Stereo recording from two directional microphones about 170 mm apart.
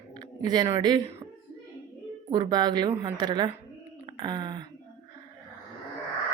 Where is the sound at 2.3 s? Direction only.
25° right (ahead or behind).